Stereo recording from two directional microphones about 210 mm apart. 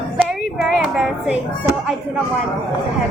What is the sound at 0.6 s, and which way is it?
Music, 5° right (ahead or behind).